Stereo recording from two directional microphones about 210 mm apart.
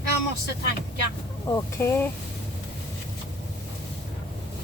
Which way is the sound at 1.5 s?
15° left (ahead or behind).